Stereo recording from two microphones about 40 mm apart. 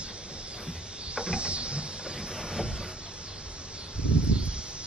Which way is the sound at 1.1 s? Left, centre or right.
Right.